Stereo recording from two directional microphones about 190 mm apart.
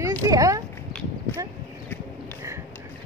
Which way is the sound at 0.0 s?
15° right (ahead or behind).